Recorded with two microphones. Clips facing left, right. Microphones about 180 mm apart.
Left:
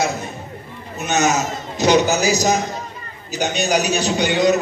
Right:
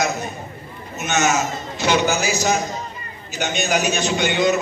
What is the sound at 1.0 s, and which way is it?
A man's voice, 35° left (ahead or behind).